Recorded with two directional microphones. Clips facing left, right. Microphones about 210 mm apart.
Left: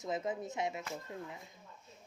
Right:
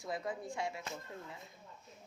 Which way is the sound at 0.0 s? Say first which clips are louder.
Left 3 dB; 20° left (ahead or behind).